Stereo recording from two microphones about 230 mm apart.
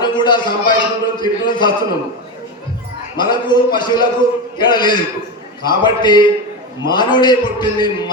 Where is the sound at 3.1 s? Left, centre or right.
Centre.